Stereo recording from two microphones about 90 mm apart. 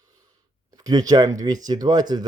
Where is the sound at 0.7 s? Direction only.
45° right (ahead or behind).